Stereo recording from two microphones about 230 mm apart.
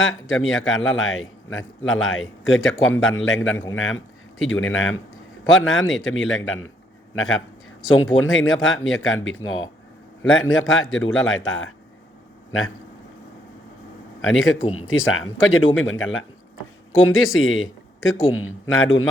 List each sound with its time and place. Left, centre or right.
0.0 s speech: left
10.5 s speech: left
14.3 s speech: left